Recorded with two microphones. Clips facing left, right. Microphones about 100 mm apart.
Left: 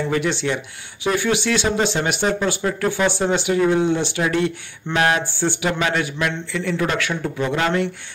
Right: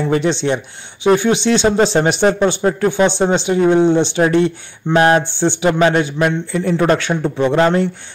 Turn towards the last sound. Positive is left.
turn(degrees=-30)  # may be behind; listen again after turning